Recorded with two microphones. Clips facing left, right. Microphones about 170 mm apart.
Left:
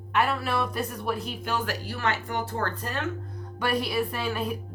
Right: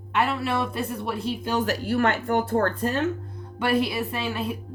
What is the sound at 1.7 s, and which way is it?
Speech, 50° right (ahead or behind).